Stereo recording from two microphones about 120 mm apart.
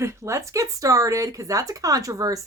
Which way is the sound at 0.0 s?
25° right (ahead or behind).